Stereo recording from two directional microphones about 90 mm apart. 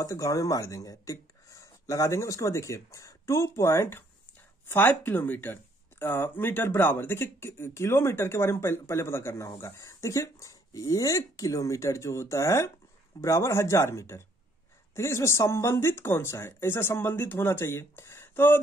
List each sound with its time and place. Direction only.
0.0 s speech: 40° left (ahead or behind)